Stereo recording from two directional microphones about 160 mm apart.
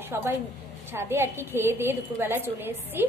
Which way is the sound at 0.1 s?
15° right (ahead or behind).